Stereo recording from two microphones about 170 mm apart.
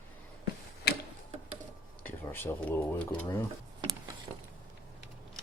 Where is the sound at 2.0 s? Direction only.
15° left (ahead or behind).